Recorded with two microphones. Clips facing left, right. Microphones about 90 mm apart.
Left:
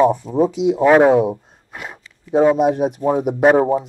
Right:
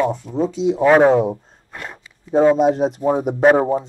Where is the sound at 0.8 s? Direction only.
5° left (ahead or behind).